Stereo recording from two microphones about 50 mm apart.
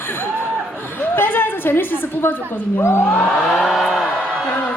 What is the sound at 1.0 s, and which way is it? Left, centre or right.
A woman's voice, left.